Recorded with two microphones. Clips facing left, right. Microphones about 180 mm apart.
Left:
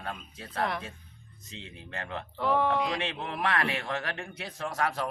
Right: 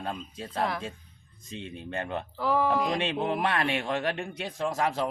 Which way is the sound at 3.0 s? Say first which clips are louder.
Right 5 dB; 30° right (ahead or behind).